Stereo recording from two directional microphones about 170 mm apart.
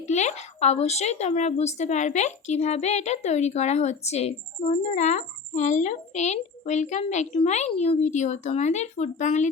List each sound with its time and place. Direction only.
0.0 s a woman's voice: 45° left (ahead or behind)